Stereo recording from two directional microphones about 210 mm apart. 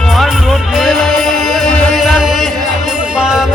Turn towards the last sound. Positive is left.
turn(degrees=-5)  # may be behind; listen again after turning